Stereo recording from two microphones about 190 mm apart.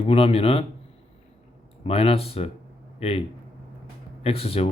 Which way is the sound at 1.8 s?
30° left (ahead or behind).